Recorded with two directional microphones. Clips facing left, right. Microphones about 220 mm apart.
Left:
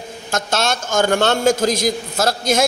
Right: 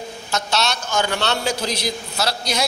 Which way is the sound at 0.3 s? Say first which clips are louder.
Left 3 dB; 50° left (ahead or behind).